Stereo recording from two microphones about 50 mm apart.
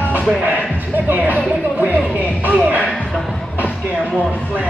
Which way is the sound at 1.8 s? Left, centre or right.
Right.